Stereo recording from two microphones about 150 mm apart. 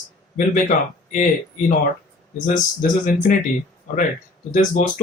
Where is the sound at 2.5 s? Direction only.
60° left (ahead or behind).